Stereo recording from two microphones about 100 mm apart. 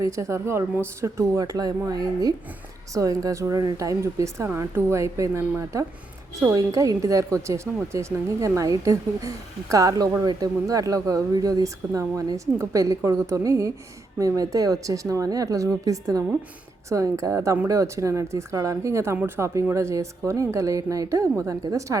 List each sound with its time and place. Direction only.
0.0 s speech: 30° right (ahead or behind)
2.9 s speech: 35° right (ahead or behind)